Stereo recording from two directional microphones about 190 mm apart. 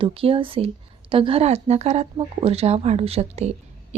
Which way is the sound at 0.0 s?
30° right (ahead or behind).